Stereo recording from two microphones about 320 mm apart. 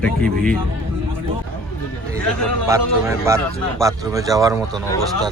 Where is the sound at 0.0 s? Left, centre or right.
Centre.